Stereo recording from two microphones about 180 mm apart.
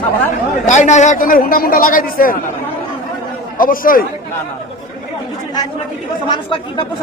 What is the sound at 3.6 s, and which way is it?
Speech, 50° left (ahead or behind).